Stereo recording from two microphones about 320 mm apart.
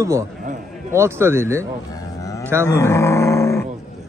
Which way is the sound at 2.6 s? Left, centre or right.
Centre.